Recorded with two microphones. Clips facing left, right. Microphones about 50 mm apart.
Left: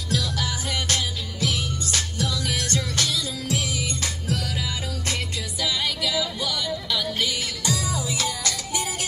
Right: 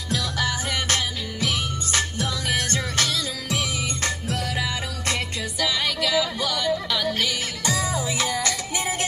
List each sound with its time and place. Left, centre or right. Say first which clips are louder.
0.1 s music: right 2 dB; right
7.1 s music: right 1 dB; right